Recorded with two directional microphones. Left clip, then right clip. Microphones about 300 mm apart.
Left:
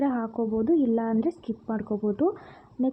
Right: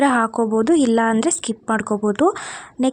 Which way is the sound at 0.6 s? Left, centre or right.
Centre.